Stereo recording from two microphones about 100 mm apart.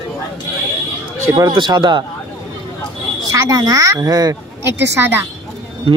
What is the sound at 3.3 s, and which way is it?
A woman's voice, 35° right (ahead or behind).